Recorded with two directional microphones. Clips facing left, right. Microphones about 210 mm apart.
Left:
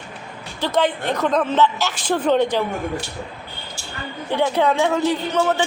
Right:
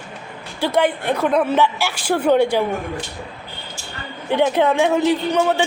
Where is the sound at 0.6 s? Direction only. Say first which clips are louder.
Right 2 dB; 10° right (ahead or behind).